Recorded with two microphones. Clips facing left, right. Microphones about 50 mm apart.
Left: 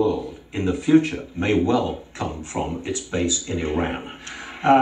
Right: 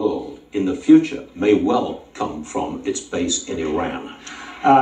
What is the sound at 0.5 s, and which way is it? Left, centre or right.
A man's voice, left.